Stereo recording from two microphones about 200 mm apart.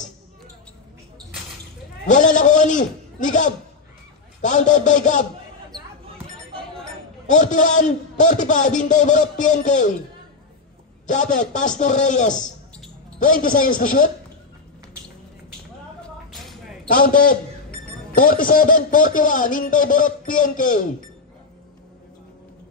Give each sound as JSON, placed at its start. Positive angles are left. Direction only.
{"t": 2.0, "sound": "a sound", "side_deg": 40}
{"t": 4.4, "sound": "a man's voice", "side_deg": 40}
{"t": 7.2, "sound": "a man's voice", "side_deg": 40}
{"t": 11.1, "sound": "a man's voice", "side_deg": 40}
{"t": 16.9, "sound": "a man's voice", "side_deg": 45}